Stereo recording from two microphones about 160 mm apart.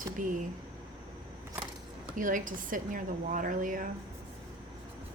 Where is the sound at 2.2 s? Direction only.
55° right (ahead or behind).